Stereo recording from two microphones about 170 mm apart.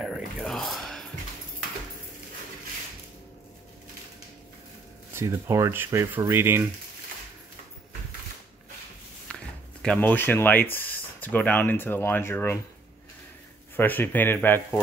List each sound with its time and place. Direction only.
0.0 s a sound: centre (ahead or behind)
5.1 s speech: 15° right (ahead or behind)
9.3 s speech: 5° left (ahead or behind)
13.7 s speech: 10° left (ahead or behind)